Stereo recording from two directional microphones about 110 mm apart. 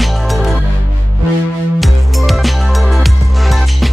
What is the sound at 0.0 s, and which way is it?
Music, centre (ahead or behind).